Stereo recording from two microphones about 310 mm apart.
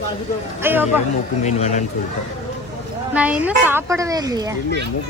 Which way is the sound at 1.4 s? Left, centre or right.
Left.